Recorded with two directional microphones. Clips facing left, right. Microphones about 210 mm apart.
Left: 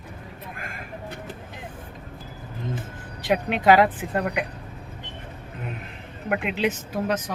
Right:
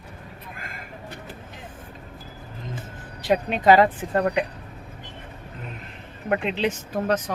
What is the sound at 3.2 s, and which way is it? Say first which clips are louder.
Speech: right 1 dB; 10° left (ahead or behind).